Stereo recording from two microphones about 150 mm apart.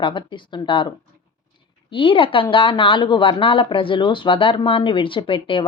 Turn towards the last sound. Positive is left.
turn(degrees=35)  # may be behind; listen again after turning